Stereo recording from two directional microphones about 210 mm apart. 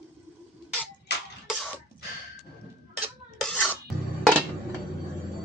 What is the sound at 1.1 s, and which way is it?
Beatboxing, 50° left (ahead or behind).